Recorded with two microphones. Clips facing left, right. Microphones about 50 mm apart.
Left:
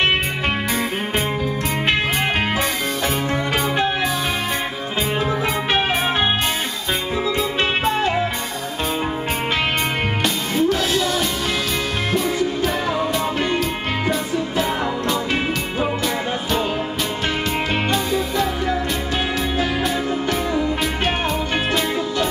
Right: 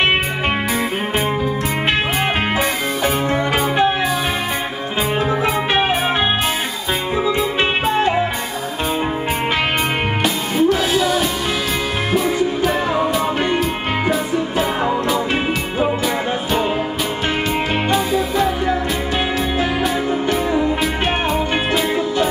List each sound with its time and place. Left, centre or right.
3.3 s music: centre
5.2 s music: centre
7.2 s music: centre
10.2 s music: centre
12.4 s music: centre
17.9 s music: centre
20.1 s music: right